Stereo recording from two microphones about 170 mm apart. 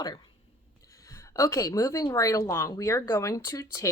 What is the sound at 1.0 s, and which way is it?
Speech, 20° left (ahead or behind).